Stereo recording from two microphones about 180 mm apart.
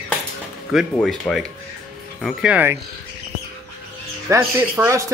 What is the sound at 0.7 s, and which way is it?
Speech, centre (ahead or behind).